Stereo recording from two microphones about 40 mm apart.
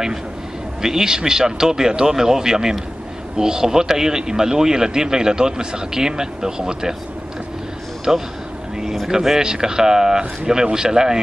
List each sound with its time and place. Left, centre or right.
0.8 s speech: centre
8.1 s speech: centre